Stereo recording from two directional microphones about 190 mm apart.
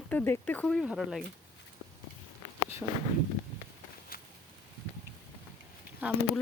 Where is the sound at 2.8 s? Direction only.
5° right (ahead or behind).